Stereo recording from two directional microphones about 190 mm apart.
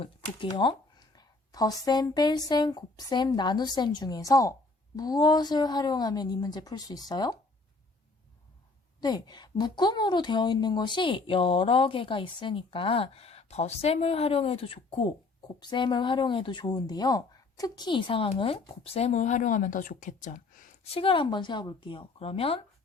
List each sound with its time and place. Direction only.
0.0 s a woman's voice: 25° left (ahead or behind)
9.0 s a woman's voice: 20° left (ahead or behind); by 20.7 s 45° left (ahead or behind)
20.9 s a woman's voice: 25° left (ahead or behind)